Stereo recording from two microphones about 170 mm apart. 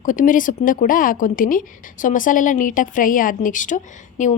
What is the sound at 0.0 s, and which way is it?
A woman's voice, 50° left (ahead or behind).